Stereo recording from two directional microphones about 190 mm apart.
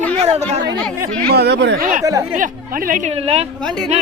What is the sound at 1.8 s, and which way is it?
Speech, 45° right (ahead or behind).